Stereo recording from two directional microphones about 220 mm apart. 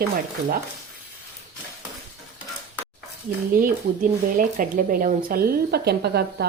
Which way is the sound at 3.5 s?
40° right (ahead or behind).